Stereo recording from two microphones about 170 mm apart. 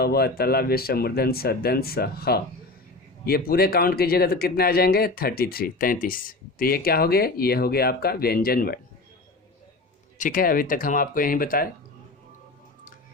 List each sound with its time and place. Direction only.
0.0 s speech: 65° left (ahead or behind)
10.2 s speech: 55° left (ahead or behind)